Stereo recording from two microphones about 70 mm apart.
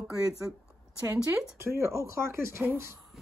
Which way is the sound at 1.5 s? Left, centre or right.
Right.